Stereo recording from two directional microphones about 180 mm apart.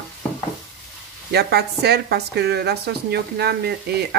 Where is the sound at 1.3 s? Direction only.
65° right (ahead or behind).